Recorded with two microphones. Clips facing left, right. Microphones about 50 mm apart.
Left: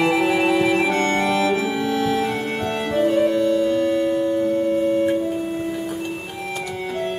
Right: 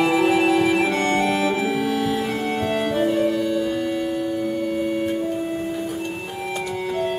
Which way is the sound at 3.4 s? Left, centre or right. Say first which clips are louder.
Left 4 dB; centre.